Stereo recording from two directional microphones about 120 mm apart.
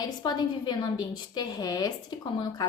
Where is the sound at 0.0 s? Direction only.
35° left (ahead or behind).